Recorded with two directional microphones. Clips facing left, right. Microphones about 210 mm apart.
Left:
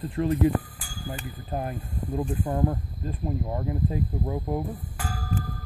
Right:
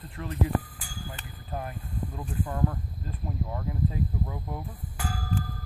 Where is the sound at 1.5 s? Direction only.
30° left (ahead or behind).